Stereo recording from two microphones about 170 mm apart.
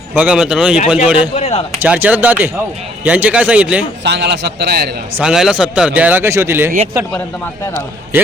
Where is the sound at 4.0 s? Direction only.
90° right; by 5.0 s 70° right (ahead or behind).